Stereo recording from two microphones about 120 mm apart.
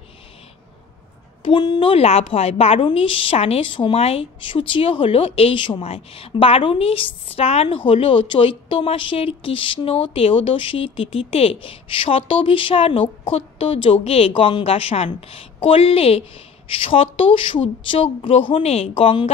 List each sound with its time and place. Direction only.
1.4 s speech: 40° left (ahead or behind)
1.8 s a woman's voice: 55° left (ahead or behind)